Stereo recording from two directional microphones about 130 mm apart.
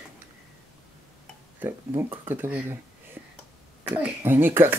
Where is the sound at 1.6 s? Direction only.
20° right (ahead or behind).